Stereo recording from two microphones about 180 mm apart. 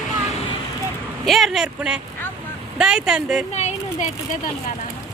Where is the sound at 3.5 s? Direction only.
40° left (ahead or behind).